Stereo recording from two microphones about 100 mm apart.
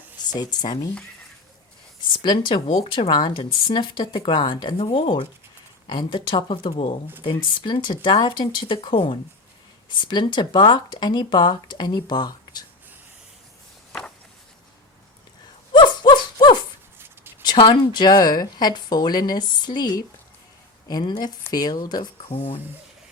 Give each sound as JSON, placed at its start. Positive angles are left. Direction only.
{"t": 0.3, "sound": "speech", "side_deg": 40}
{"t": 2.0, "sound": "speech", "side_deg": 50}
{"t": 2.6, "sound": "speech", "side_deg": 90}
{"t": 3.1, "sound": "speech", "side_deg": 55}
{"t": 5.9, "sound": "speech", "side_deg": 50}
{"t": 7.3, "sound": "speech", "side_deg": 50}
{"t": 15.7, "sound": "a sound", "side_deg": 50}
{"t": 17.4, "sound": "speech", "side_deg": 50}
{"t": 22.2, "sound": "speech", "side_deg": 75}